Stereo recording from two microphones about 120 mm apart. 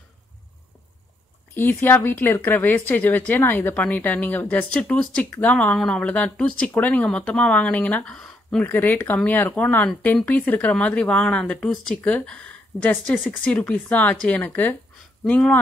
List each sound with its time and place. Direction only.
1.5 s speech: 15° left (ahead or behind)
8.6 s speech: 15° left (ahead or behind)